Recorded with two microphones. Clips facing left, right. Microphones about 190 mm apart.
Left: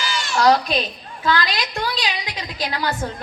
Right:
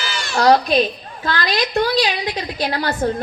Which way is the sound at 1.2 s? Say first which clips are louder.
Left 2 dB; 45° right (ahead or behind).